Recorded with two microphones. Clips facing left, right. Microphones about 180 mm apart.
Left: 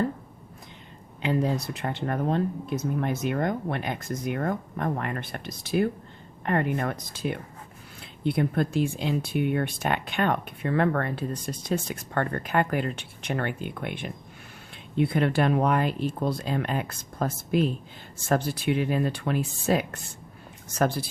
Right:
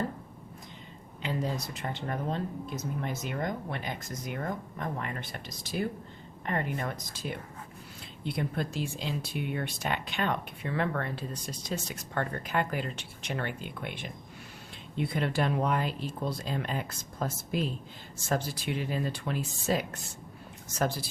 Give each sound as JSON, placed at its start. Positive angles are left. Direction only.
{"t": 1.2, "sound": "speech", "side_deg": 60}